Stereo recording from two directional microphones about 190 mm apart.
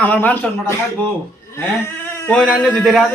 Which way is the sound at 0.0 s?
10° left (ahead or behind).